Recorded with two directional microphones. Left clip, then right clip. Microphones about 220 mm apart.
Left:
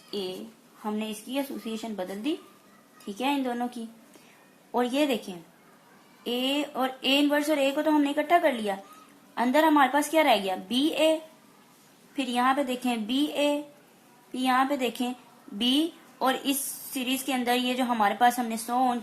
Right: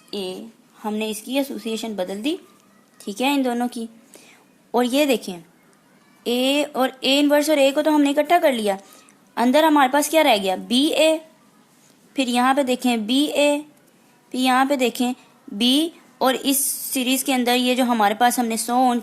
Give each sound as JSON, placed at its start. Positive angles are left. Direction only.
{"t": 0.8, "sound": "a woman's voice", "side_deg": -50}